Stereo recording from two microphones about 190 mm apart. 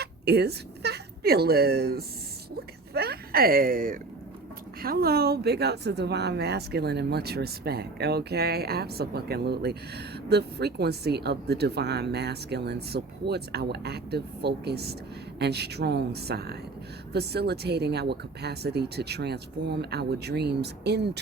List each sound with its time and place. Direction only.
0.0 s speech: 60° right (ahead or behind)